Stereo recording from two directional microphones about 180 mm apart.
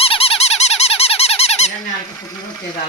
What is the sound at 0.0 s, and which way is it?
Squeak, 35° left (ahead or behind).